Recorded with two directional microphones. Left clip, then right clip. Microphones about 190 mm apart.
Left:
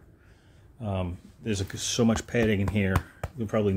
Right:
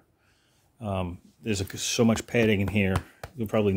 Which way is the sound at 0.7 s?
25° right (ahead or behind).